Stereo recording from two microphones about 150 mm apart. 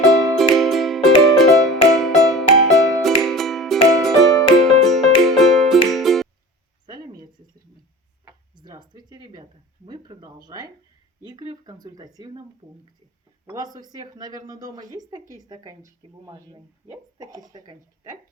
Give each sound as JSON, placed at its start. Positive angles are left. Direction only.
{"t": 0.0, "sound": "music", "side_deg": 0}
{"t": 8.5, "sound": "a sound", "side_deg": -30}
{"t": 11.2, "sound": "speech", "side_deg": -25}
{"t": 13.5, "sound": "speech", "side_deg": -25}